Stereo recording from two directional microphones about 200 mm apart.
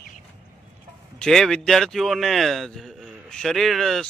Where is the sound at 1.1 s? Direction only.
Centre (ahead or behind).